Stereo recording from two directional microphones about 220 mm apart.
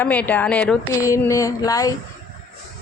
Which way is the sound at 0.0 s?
5° left (ahead or behind).